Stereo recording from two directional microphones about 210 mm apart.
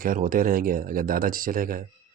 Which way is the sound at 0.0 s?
40° right (ahead or behind).